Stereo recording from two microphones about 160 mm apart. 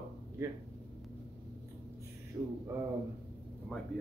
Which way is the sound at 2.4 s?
15° right (ahead or behind).